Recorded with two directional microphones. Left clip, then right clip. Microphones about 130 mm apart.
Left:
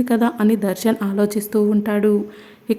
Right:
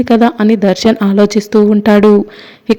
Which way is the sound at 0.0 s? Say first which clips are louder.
Right 9 dB; 30° right (ahead or behind).